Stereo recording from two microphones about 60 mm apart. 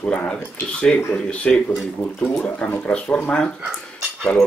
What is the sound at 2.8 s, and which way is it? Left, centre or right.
Speech, centre.